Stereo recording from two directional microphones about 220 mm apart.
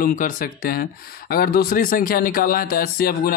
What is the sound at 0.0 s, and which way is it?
Speech, 40° left (ahead or behind).